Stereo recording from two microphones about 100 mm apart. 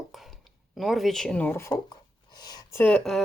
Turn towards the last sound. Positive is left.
turn(degrees=5)  # may be behind; listen again after turning